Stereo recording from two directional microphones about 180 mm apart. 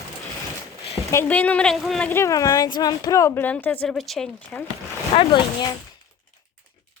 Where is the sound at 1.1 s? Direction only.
10° left (ahead or behind).